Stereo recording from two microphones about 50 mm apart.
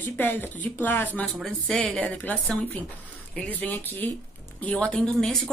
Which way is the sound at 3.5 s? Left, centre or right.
Left.